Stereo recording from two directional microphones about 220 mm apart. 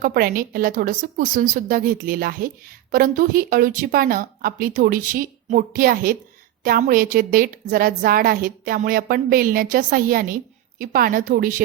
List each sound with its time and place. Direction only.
0.0 s a woman's voice: 40° right (ahead or behind)